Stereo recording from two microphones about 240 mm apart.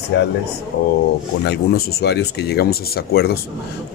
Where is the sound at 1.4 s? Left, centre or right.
Left.